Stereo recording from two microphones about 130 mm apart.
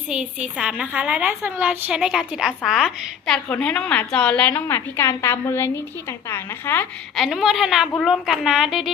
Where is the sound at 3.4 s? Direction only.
10° left (ahead or behind).